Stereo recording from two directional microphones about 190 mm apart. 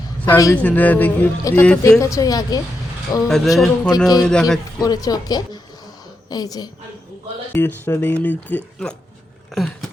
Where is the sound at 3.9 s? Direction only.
20° left (ahead or behind).